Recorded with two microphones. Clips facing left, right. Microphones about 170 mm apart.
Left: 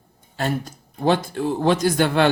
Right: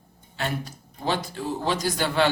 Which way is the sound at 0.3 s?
45° left (ahead or behind).